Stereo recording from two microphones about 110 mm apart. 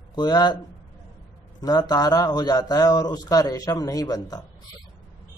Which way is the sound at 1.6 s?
35° left (ahead or behind).